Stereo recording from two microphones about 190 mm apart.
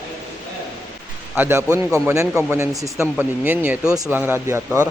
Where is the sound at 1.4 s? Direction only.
15° right (ahead or behind).